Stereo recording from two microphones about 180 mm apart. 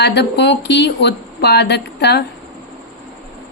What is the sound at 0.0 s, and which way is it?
Speech, 70° left (ahead or behind).